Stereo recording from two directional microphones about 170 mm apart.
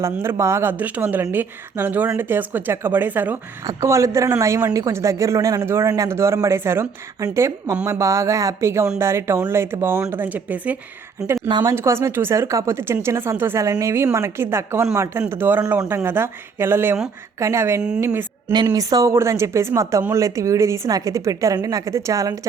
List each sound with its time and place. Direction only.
0.0 s a woman's voice: 15° right (ahead or behind)
11.4 s speech: 25° right (ahead or behind)
11.7 s a woman's voice: 15° right (ahead or behind)
18.0 s a sound: 15° right (ahead or behind)
18.5 s speech: 25° right (ahead or behind)